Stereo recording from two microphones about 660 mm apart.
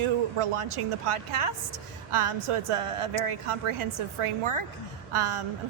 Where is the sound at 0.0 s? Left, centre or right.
Right.